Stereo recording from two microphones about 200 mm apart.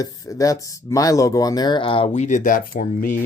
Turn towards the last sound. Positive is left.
turn(degrees=40)  # may be behind; listen again after turning